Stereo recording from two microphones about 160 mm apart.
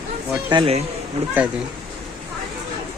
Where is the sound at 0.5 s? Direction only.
35° right (ahead or behind).